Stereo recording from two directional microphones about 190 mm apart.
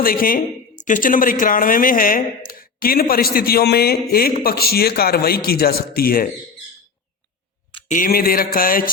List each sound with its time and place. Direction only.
0.0 s speech: 50° left (ahead or behind)
7.9 s speech: 45° left (ahead or behind)